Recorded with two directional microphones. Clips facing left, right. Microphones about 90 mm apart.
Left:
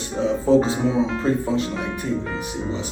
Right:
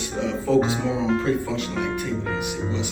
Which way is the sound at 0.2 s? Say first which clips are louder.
Left 3 dB; 35° left (ahead or behind).